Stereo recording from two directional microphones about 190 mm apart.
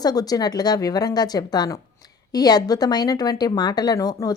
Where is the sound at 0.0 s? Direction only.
20° left (ahead or behind).